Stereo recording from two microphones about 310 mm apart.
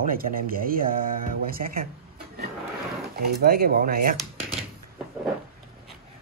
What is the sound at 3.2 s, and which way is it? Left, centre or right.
Speech, right.